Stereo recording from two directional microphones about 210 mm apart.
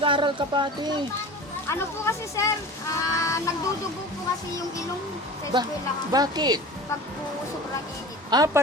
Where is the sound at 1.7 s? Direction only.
15° left (ahead or behind).